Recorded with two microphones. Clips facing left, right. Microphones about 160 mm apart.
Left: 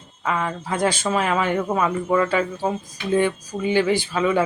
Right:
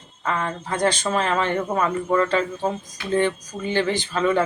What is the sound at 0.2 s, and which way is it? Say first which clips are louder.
Speech: left 1 dB; 5° left (ahead or behind).